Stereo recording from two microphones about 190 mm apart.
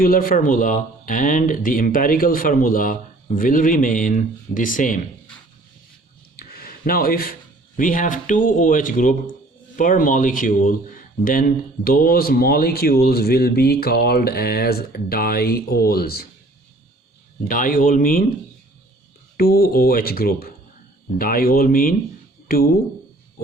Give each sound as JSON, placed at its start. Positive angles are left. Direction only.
{"t": 0.0, "sound": "speech", "side_deg": 50}
{"t": 6.3, "sound": "a sound", "side_deg": 50}
{"t": 7.8, "sound": "speech", "side_deg": 45}
{"t": 17.5, "sound": "speech", "side_deg": 45}
{"t": 19.4, "sound": "speech", "side_deg": 50}